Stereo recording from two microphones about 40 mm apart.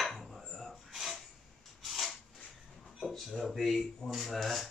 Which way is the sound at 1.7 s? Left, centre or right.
Centre.